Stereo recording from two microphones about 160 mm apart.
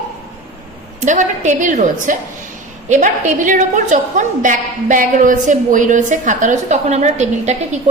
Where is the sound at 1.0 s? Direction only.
50° right (ahead or behind).